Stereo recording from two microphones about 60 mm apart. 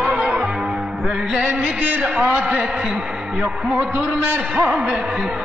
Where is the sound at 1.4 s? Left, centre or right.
Right.